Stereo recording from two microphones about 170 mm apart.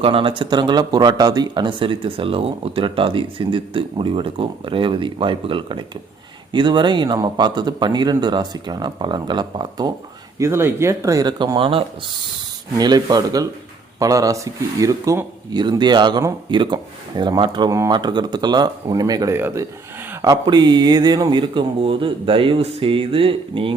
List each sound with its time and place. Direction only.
0.0 s speech: 30° right (ahead or behind)